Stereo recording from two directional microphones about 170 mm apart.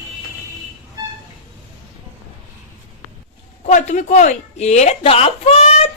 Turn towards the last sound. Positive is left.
turn(degrees=40)  # may be behind; listen again after turning